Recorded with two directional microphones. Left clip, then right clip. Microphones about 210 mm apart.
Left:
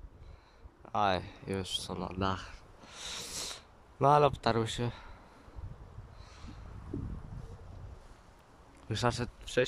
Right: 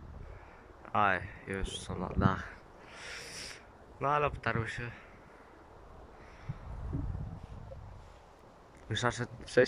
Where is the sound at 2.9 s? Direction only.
15° left (ahead or behind).